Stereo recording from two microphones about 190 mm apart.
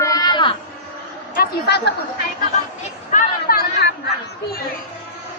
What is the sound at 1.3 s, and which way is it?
Speech, 55° left (ahead or behind).